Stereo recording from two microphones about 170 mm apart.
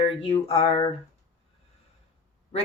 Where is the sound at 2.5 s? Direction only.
40° left (ahead or behind).